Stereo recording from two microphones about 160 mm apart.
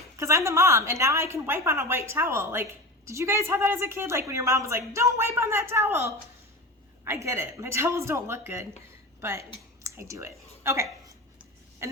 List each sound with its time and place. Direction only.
0.2 s a woman's voice: 20° right (ahead or behind)